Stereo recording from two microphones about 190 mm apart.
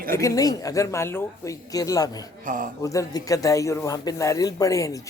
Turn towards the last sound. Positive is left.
turn(degrees=15)  # may be behind; listen again after turning